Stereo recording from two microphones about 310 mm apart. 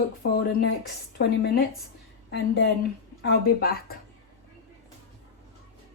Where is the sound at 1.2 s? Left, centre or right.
Left.